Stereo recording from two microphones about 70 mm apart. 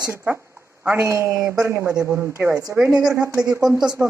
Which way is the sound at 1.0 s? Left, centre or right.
Right.